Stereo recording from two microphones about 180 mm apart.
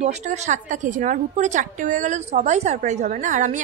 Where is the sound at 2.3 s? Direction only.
40° right (ahead or behind).